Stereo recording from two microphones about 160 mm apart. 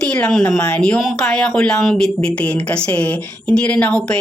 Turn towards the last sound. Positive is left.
turn(degrees=5)  # may be behind; listen again after turning